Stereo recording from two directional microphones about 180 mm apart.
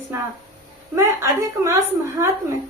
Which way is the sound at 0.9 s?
15° right (ahead or behind).